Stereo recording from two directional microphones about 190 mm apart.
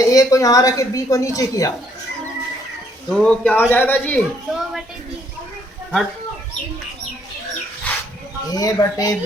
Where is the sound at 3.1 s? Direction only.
5° left (ahead or behind).